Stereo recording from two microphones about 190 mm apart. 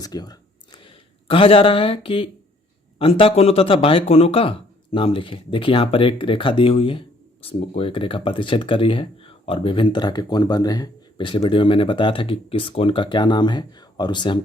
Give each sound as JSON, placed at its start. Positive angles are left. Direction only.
{"t": 0.0, "sound": "speech", "side_deg": 20}